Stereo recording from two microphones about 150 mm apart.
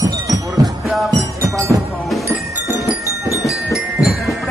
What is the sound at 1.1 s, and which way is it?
Music, 20° right (ahead or behind).